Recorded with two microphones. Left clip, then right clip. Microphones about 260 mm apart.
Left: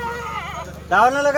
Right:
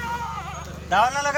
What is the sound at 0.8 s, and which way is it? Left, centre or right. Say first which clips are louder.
Speech: left 5 dB; left.